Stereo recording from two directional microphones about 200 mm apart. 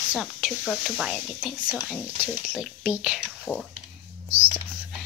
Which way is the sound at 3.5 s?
10° left (ahead or behind).